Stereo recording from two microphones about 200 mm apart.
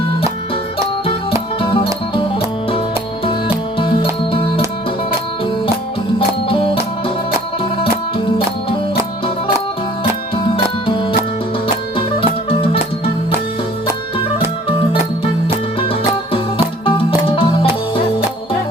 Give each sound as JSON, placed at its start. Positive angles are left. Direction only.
{"t": 1.6, "sound": "music", "side_deg": 25}
{"t": 3.8, "sound": "music", "side_deg": 25}
{"t": 6.1, "sound": "music", "side_deg": 25}
{"t": 10.0, "sound": "music", "side_deg": 25}
{"t": 12.5, "sound": "music", "side_deg": 25}
{"t": 17.2, "sound": "music", "side_deg": 25}